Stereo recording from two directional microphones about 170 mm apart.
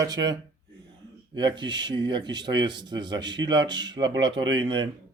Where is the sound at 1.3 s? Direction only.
25° right (ahead or behind).